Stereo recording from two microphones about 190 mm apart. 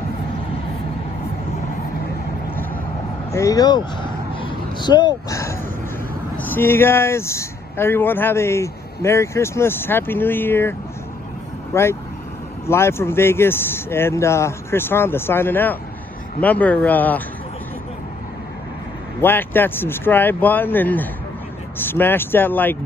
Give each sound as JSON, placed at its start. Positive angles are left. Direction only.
{"t": 3.3, "sound": "a sound", "side_deg": 15}
{"t": 6.3, "sound": "speech", "side_deg": 10}
{"t": 19.2, "sound": "speech", "side_deg": 10}